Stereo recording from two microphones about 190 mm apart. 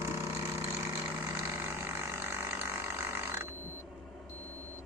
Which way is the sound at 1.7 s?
10° right (ahead or behind).